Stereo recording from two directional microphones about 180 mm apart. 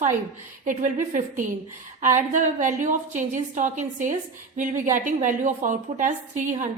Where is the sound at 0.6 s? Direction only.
45° right (ahead or behind).